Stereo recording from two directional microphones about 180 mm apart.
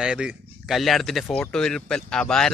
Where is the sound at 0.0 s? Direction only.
5° right (ahead or behind).